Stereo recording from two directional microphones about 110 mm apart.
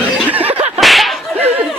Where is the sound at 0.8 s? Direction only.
Centre (ahead or behind).